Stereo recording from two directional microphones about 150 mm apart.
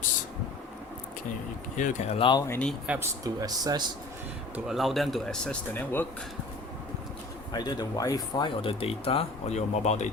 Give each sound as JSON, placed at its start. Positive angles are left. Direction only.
{"t": 1.7, "sound": "speech", "side_deg": 55}
{"t": 2.5, "sound": "speech", "side_deg": 10}
{"t": 2.8, "sound": "speech", "side_deg": -10}
{"t": 3.2, "sound": "speech", "side_deg": -25}
{"t": 4.5, "sound": "speech", "side_deg": 0}
{"t": 7.5, "sound": "speech", "side_deg": 30}